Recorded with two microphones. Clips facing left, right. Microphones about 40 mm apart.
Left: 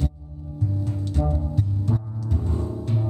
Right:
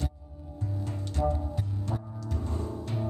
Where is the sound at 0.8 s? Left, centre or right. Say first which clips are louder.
Left 1 dB; centre.